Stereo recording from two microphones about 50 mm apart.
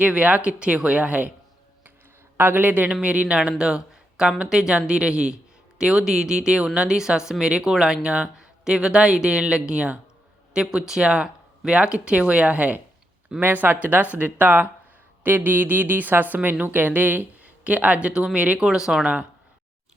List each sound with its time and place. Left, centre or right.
0.0 s speech: right
2.4 s speech: right
2.9 s speech: right
13.4 s speech: right; by 19.0 s centre